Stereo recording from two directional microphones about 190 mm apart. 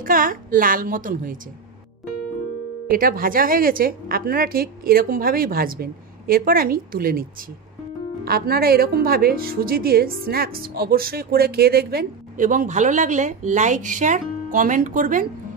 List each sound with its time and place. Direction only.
0.0 s a woman's voice: 45° right (ahead or behind)
2.9 s a woman's voice: 50° right (ahead or behind)